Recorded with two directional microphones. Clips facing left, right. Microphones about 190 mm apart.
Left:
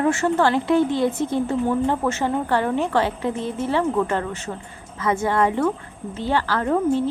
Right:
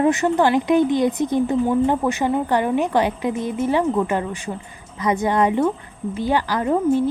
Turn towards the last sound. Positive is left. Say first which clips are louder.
# right 2 dB
turn(degrees=-15)  # may be behind; listen again after turning